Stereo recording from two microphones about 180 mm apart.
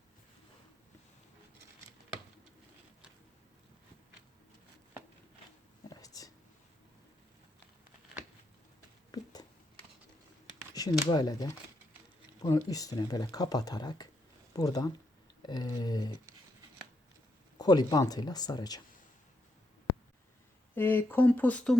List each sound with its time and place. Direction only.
5.9 s whispering: 20° left (ahead or behind)
9.1 s a sound: 20° left (ahead or behind)
10.8 s speech: 20° left (ahead or behind)
17.6 s speech: 20° left (ahead or behind)
20.7 s speech: 10° left (ahead or behind)